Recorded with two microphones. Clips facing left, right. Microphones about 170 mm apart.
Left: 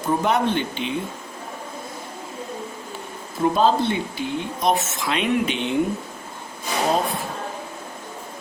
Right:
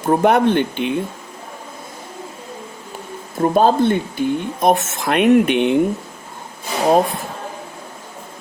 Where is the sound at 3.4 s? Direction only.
50° right (ahead or behind).